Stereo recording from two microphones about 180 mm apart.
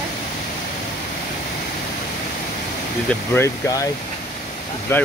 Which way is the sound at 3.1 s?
15° left (ahead or behind).